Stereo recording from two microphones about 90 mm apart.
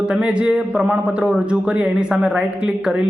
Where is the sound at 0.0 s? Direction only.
10° right (ahead or behind).